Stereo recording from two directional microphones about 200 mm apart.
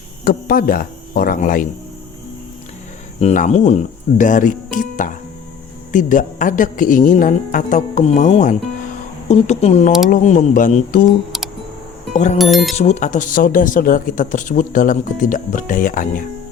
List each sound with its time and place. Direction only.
0.3 s speech: 50° left (ahead or behind)
3.2 s speech: 35° left (ahead or behind)
12.1 s speech: 40° left (ahead or behind)
12.4 s speech: centre (ahead or behind)
12.7 s speech: 35° left (ahead or behind)